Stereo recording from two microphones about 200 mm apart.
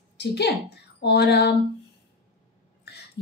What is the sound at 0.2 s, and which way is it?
A woman's voice, 55° left (ahead or behind).